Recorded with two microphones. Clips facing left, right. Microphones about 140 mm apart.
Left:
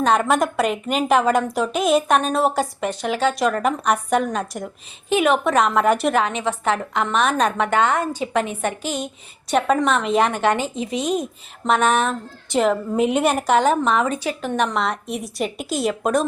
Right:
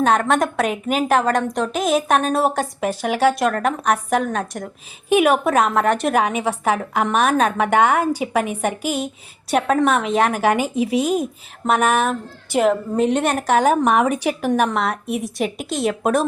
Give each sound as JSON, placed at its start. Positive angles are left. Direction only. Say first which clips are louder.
{"t": 0.0, "sound": "a woman's voice", "louder": "right 1 dB", "side_deg": 0}
{"t": 3.4, "sound": "a woman's voice", "louder": "even", "side_deg": 0}
{"t": 5.0, "sound": "a woman's voice", "louder": "right 2 dB", "side_deg": -10}
{"t": 6.1, "sound": "a woman's voice", "louder": "right 2 dB", "side_deg": -10}
{"t": 13.0, "sound": "a woman's voice", "louder": "left 2 dB", "side_deg": 5}